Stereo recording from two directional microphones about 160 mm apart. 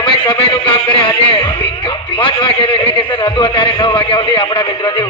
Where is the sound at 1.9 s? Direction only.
30° left (ahead or behind).